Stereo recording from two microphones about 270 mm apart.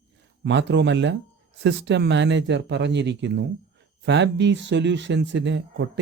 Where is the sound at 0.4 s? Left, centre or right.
Right.